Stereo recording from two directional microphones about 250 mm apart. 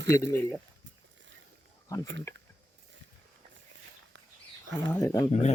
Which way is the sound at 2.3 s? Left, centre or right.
Centre.